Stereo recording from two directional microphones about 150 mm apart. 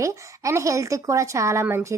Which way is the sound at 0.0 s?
20° right (ahead or behind).